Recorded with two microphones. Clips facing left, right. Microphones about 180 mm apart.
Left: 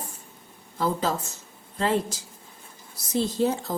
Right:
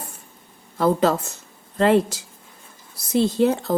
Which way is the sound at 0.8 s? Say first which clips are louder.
Right 7 dB; 65° right (ahead or behind).